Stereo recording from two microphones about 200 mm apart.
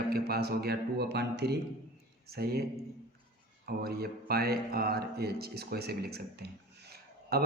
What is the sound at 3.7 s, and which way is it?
Music, 50° right (ahead or behind).